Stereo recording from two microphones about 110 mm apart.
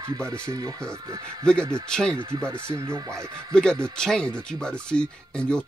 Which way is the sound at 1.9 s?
5° left (ahead or behind).